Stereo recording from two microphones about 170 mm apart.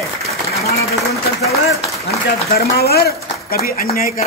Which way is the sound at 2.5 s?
65° left (ahead or behind).